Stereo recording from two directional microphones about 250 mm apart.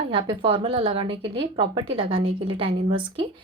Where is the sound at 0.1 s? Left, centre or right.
Right.